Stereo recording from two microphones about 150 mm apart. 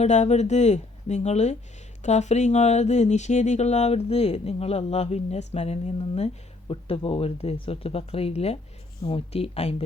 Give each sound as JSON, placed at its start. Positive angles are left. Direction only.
{"t": 0.0, "sound": "speech", "side_deg": 50}